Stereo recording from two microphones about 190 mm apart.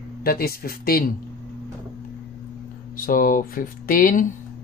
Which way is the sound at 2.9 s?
50° left (ahead or behind).